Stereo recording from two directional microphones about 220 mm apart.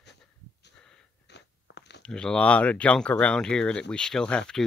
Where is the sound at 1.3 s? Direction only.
50° left (ahead or behind).